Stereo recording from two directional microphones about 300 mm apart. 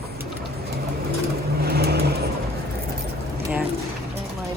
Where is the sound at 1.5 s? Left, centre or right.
Right.